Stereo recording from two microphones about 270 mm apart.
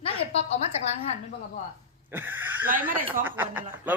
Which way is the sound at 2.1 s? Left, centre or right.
Centre.